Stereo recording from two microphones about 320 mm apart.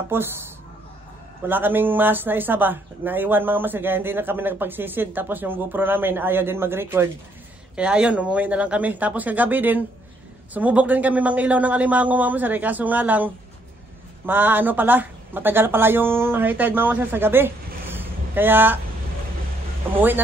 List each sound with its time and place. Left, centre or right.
0.1 s speech: centre
1.5 s a man's voice: centre